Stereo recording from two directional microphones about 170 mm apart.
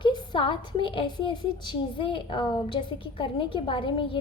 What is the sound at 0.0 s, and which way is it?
A woman's voice, 25° left (ahead or behind).